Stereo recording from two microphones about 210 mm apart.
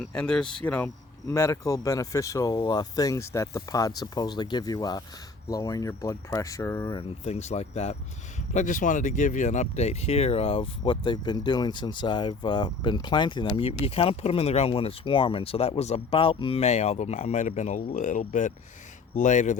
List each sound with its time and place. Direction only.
0.0 s speech: 5° left (ahead or behind)
7.3 s speech: 30° left (ahead or behind)